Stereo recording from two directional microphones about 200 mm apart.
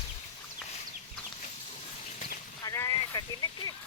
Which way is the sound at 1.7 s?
35° left (ahead or behind).